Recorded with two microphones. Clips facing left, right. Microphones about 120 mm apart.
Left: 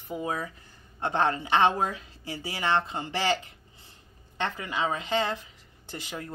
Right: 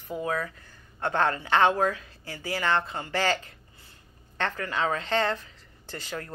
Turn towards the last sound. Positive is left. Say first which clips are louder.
# right 1 dB
turn(degrees=15)  # may be behind; listen again after turning